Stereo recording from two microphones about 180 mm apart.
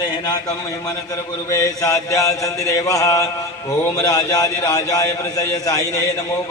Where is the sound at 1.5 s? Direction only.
20° left (ahead or behind).